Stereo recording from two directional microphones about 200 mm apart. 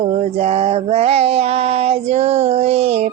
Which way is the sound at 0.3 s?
30° right (ahead or behind).